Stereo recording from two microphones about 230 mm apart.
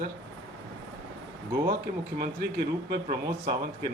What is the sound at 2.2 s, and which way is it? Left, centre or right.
Speech, right.